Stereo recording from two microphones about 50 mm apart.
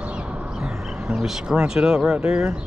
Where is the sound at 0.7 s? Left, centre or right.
Centre.